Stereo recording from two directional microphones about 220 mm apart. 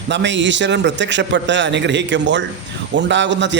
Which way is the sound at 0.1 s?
55° right (ahead or behind).